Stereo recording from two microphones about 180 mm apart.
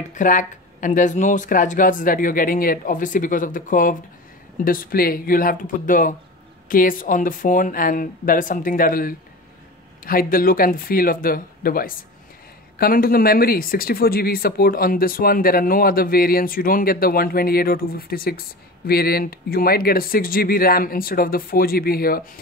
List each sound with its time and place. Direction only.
0.1 s speech: 45° left (ahead or behind)